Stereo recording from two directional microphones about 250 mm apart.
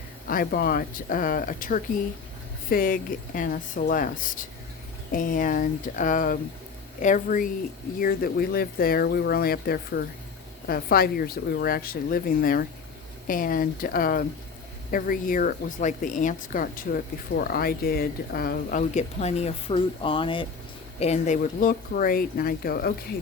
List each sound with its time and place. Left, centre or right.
0.3 s speech: left